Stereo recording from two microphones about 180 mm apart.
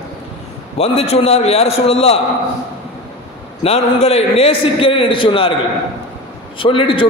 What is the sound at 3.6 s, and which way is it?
A man's voice, 35° left (ahead or behind).